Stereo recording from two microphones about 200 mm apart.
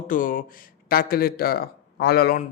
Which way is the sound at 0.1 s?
40° left (ahead or behind).